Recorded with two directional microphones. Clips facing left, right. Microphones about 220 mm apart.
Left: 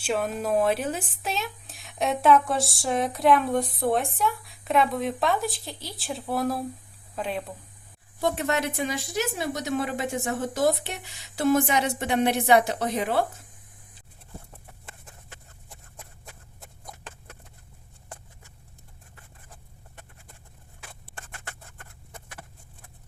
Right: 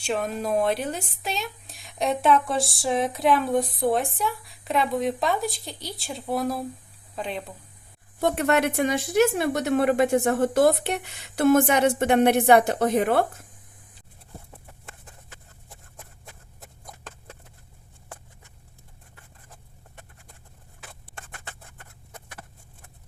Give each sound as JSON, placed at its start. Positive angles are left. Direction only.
{"t": 0.0, "sound": "speech", "side_deg": 0}
{"t": 8.2, "sound": "a woman's voice", "side_deg": -60}